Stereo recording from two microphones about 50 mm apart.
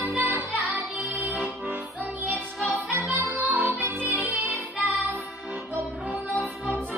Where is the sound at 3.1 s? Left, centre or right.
Right.